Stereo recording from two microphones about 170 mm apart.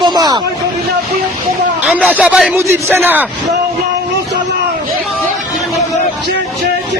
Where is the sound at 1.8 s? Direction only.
10° right (ahead or behind).